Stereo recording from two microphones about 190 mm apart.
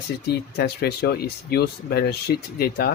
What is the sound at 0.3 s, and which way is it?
Speech, 55° left (ahead or behind).